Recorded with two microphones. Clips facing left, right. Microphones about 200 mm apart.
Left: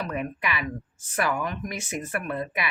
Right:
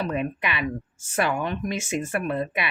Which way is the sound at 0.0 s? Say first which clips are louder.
Right 3 dB; 25° right (ahead or behind).